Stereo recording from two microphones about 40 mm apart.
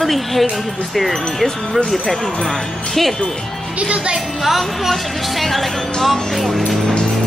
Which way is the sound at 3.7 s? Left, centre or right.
Right.